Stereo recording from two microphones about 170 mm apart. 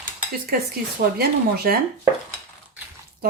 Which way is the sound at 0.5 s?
65° right (ahead or behind).